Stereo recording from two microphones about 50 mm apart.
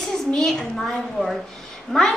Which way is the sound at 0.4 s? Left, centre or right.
Centre.